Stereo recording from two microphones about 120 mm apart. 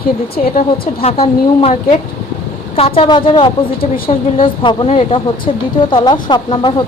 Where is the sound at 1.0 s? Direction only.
55° left (ahead or behind).